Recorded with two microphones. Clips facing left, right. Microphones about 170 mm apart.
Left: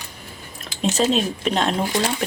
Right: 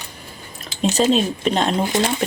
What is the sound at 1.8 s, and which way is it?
Speech, 20° right (ahead or behind).